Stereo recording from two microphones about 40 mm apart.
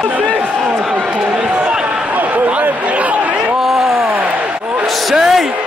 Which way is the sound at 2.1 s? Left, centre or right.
Right.